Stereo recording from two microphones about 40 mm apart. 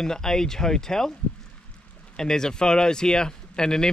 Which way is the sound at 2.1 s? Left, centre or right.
Centre.